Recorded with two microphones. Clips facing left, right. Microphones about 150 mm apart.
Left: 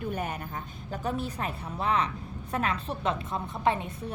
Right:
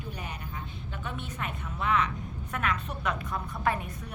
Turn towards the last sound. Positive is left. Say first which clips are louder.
# left 3 dB
turn(degrees=25)  # may be behind; listen again after turning